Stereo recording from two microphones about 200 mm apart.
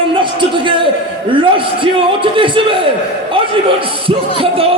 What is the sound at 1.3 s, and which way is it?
A man's voice, 25° right (ahead or behind).